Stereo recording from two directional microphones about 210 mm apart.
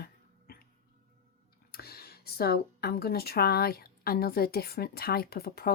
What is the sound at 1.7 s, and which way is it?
A woman's voice, 45° left (ahead or behind).